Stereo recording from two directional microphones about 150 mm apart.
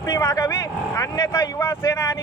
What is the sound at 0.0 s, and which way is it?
Speech, 25° left (ahead or behind).